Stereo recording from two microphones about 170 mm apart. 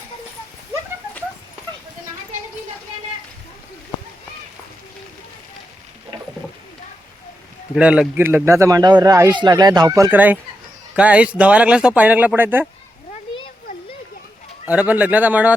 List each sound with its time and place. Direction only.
7.8 s a man's voice: 5° right (ahead or behind)
14.7 s a man's voice: 10° right (ahead or behind)